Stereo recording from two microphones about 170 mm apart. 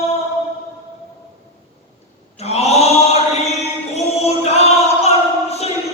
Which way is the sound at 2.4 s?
40° left (ahead or behind).